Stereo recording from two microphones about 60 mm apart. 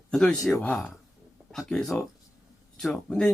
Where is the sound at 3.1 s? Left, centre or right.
Centre.